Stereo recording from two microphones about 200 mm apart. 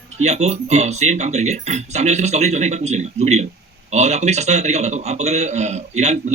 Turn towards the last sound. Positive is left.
turn(degrees=-35)  # may be behind; listen again after turning